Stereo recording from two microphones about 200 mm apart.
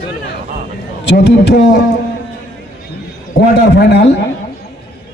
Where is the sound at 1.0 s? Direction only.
60° left (ahead or behind).